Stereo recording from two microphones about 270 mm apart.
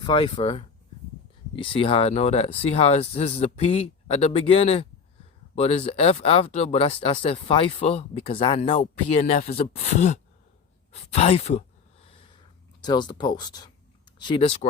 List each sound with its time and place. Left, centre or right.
0.0 s speech: centre
12.8 s speech: centre